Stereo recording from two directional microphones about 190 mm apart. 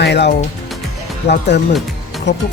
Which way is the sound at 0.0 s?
60° left (ahead or behind).